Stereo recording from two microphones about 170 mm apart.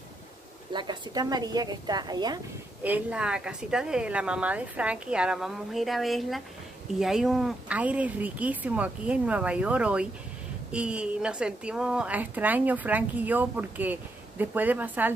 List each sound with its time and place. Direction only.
0.7 s a woman's voice: 25° right (ahead or behind)
2.8 s a woman's voice: 10° right (ahead or behind)